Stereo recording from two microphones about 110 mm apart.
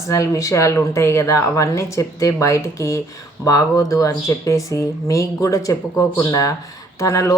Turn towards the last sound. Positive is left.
turn(degrees=30)  # may be behind; listen again after turning